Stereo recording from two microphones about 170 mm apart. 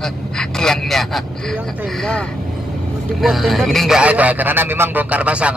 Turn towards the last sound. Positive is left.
turn(degrees=-5)  # may be behind; listen again after turning